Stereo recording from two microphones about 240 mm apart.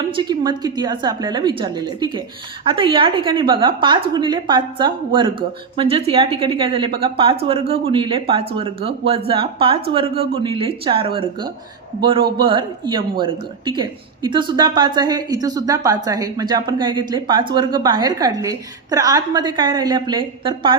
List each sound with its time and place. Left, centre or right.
0.2 s a woman's voice: centre